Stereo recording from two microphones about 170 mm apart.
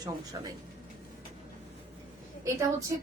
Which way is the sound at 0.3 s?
25° right (ahead or behind).